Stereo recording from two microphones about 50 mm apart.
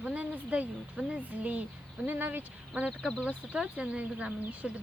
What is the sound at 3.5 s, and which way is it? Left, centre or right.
Speech, right.